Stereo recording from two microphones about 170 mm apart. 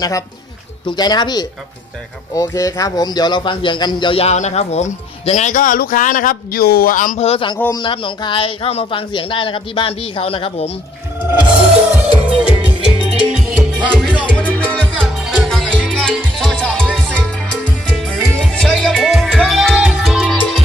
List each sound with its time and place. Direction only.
0.0 s a man's voice: 20° left (ahead or behind); by 7.3 s 50° left (ahead or behind)
7.3 s a man's voice: 30° left (ahead or behind)
11.9 s music: 5° right (ahead or behind)
13.9 s music: 5° left (ahead or behind)